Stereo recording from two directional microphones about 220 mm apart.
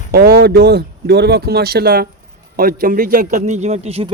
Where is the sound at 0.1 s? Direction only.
45° right (ahead or behind).